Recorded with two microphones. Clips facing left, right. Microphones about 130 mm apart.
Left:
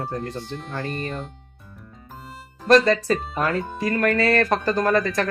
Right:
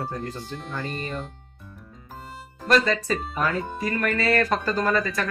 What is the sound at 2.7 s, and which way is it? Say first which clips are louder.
Speech: left 5 dB; 35° left (ahead or behind).